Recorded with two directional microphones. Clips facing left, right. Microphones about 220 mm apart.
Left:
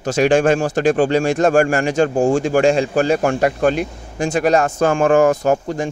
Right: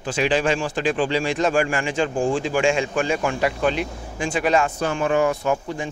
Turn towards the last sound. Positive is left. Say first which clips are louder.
# left 6 dB
turn(degrees=45)  # may be behind; listen again after turning